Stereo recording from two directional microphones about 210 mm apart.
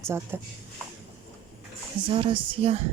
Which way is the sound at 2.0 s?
25° right (ahead or behind).